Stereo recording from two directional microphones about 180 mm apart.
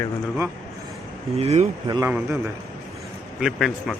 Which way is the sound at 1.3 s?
35° right (ahead or behind).